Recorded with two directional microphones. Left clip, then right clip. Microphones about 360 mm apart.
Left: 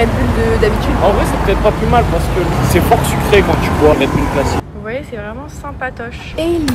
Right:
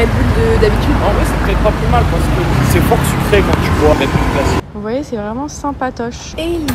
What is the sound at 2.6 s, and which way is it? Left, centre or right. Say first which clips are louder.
Speech: left 2 dB; left.